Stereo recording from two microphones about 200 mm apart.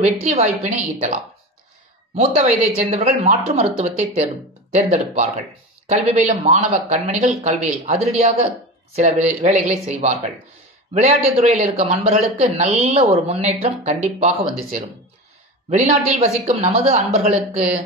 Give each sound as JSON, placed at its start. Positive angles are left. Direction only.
{"t": 0.0, "sound": "speech", "side_deg": -35}
{"t": 15.7, "sound": "speech", "side_deg": -35}